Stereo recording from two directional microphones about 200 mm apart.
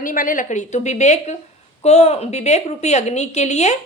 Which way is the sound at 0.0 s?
40° left (ahead or behind).